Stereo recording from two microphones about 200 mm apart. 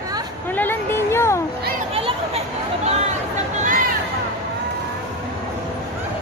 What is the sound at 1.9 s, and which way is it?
Chatter, 30° right (ahead or behind).